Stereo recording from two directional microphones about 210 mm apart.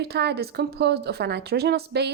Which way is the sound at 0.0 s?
50° right (ahead or behind).